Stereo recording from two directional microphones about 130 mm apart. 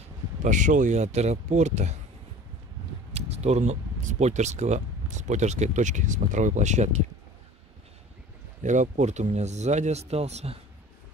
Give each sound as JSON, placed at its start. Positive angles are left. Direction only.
{"t": 0.4, "sound": "speech", "side_deg": -70}
{"t": 3.1, "sound": "a sound", "side_deg": -55}
{"t": 4.2, "sound": "speech", "side_deg": -60}
{"t": 8.6, "sound": "speech", "side_deg": -65}